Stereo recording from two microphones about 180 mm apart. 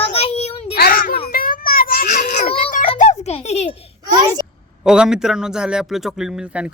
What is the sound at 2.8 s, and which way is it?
Music, 35° left (ahead or behind).